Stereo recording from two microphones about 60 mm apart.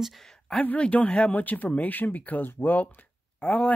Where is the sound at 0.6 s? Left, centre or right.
Left.